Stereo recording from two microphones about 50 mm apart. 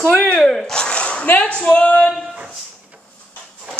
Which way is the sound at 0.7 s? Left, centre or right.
Centre.